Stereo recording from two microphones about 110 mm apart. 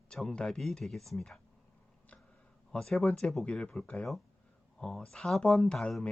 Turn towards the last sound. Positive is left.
turn(degrees=5)  # may be behind; listen again after turning